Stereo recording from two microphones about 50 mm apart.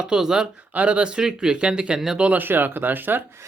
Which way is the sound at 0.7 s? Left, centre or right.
Right.